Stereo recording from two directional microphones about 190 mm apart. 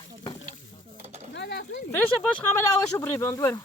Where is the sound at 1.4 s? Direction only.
65° left (ahead or behind).